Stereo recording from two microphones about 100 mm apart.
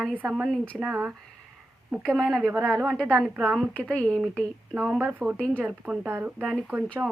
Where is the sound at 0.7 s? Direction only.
5° right (ahead or behind).